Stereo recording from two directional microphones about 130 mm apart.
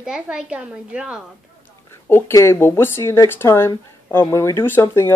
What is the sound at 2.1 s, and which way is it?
Speech, 20° left (ahead or behind).